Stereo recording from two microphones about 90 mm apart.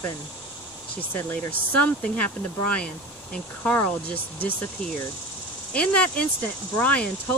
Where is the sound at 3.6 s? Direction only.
15° left (ahead or behind).